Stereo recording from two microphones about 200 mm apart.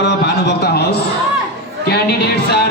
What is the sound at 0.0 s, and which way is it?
A man's voice, 55° left (ahead or behind).